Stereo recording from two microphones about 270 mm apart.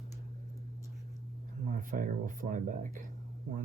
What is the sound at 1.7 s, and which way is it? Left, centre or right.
Speech, right.